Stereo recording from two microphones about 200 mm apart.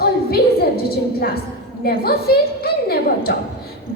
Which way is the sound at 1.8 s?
50° left (ahead or behind).